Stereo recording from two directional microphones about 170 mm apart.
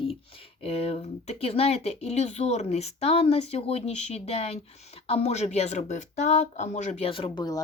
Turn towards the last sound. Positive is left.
turn(degrees=25)  # may be behind; listen again after turning